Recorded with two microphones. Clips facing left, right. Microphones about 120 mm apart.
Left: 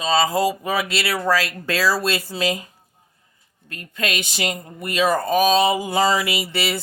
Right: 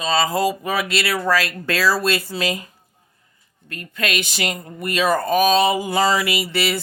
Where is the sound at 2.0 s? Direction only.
20° left (ahead or behind).